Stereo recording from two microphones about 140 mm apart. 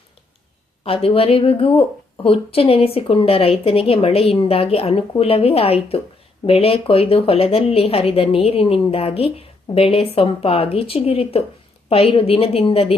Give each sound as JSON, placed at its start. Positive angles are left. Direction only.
{"t": 0.9, "sound": "a woman's voice", "side_deg": 45}